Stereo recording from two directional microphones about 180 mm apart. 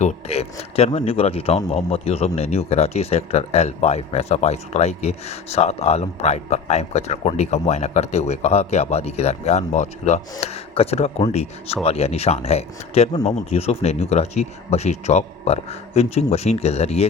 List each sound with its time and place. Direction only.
0.0 s a man's voice: 35° left (ahead or behind)